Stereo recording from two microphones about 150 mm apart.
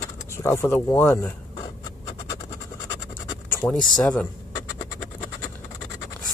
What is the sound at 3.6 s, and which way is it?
Speech, 25° left (ahead or behind).